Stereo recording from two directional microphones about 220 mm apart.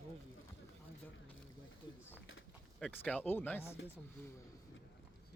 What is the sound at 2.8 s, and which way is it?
Speech, 5° left (ahead or behind).